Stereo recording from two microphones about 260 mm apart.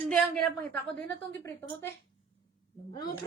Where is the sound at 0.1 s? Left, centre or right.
Centre.